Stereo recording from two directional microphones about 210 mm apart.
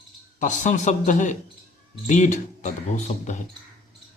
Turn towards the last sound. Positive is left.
turn(degrees=35)  # may be behind; listen again after turning